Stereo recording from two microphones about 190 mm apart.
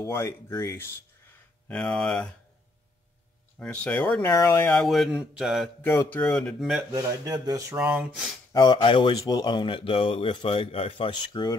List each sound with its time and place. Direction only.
0.0 s speech: 15° left (ahead or behind)
3.5 s speech: 5° left (ahead or behind)
4.8 s speech: centre (ahead or behind)
5.8 s speech: 10° left (ahead or behind)
6.9 s speech: 15° right (ahead or behind)
8.5 s speech: 25° left (ahead or behind)